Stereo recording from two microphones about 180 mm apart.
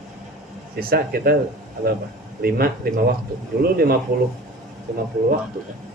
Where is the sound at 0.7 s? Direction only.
55° right (ahead or behind).